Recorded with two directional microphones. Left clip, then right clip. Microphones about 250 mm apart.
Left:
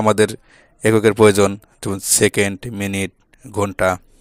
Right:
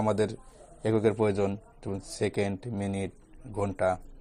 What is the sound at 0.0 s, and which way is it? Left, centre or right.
Speech, left.